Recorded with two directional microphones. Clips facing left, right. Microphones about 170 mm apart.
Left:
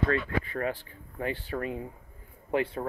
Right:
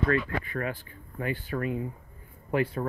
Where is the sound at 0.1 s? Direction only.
30° left (ahead or behind).